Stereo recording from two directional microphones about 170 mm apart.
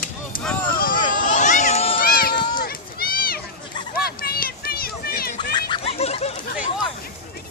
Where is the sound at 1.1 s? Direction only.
45° left (ahead or behind).